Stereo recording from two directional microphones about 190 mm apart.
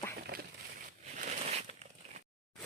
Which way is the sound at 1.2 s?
40° right (ahead or behind).